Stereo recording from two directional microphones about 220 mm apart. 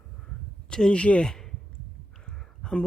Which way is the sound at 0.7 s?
5° left (ahead or behind).